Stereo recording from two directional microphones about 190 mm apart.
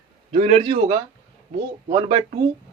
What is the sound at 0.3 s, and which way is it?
A man's voice, 35° right (ahead or behind).